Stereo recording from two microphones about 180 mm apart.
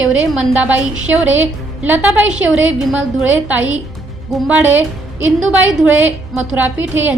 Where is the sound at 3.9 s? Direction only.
Centre (ahead or behind).